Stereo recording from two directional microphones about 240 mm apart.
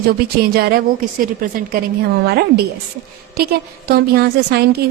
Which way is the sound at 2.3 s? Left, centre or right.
Right.